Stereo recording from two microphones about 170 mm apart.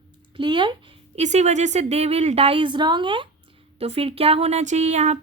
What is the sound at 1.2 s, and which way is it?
A woman's voice, 45° right (ahead or behind).